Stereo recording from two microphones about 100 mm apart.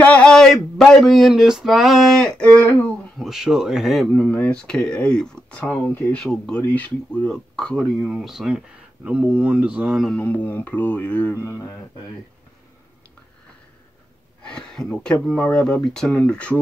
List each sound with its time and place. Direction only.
0.0 s speech: 10° left (ahead or behind)
3.2 s speech: 5° right (ahead or behind); by 6.1 s 20° left (ahead or behind)
6.1 s speech: 10° left (ahead or behind); by 9.9 s 10° right (ahead or behind)
10.1 s speech: 15° left (ahead or behind)
11.3 s speech: 30° left (ahead or behind)
14.4 s speech: 10° left (ahead or behind)
15.3 s speech: 15° left (ahead or behind)